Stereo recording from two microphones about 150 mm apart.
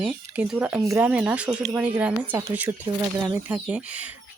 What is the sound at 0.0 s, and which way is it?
Speech, 10° right (ahead or behind).